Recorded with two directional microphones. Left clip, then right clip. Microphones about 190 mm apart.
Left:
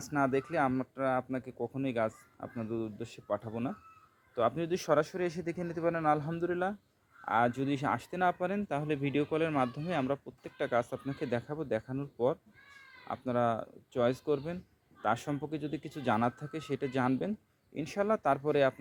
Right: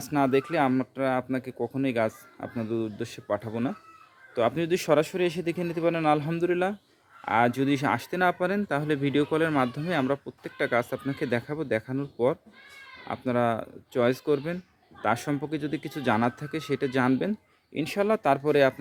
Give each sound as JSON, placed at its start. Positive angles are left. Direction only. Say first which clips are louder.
{"t": 0.0, "sound": "speech", "louder": "right 6 dB", "side_deg": 0}